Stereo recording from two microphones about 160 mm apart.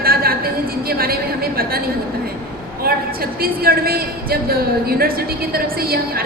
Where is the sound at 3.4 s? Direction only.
70° right (ahead or behind).